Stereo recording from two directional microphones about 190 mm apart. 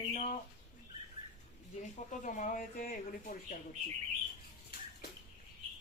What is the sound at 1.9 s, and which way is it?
Speech, 40° left (ahead or behind).